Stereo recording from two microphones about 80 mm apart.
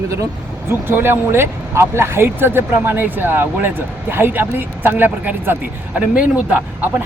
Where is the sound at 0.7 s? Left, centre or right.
Right.